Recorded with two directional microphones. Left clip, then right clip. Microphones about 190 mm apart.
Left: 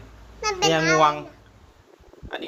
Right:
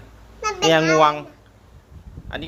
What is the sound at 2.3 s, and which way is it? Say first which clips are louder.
Speech: right 1 dB; 5° right (ahead or behind).